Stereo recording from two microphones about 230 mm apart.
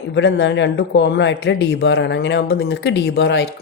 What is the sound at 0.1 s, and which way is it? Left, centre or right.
Speech, left.